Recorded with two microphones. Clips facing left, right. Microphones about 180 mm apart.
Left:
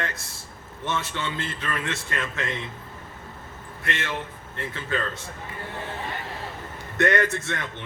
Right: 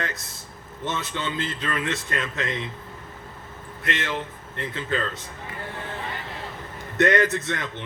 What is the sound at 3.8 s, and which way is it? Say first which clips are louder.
Speech: right 2 dB; 25° right (ahead or behind).